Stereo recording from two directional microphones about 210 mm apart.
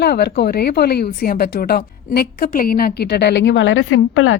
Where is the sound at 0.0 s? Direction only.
50° left (ahead or behind).